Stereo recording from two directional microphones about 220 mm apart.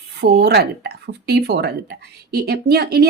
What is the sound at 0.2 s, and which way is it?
Speech, 50° right (ahead or behind).